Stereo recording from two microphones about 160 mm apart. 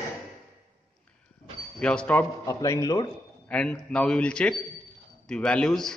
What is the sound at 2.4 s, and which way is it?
Speech, 20° left (ahead or behind).